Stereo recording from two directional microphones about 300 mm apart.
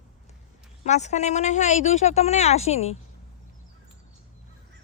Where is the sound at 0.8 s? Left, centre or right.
Left.